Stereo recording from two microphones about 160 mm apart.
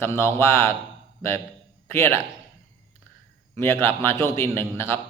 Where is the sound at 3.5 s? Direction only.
15° left (ahead or behind).